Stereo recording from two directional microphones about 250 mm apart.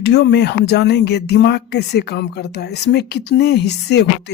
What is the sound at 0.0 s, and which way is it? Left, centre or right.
Speech, left.